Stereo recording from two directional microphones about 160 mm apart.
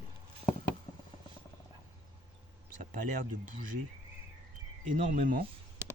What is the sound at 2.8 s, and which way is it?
Speech, 55° right (ahead or behind).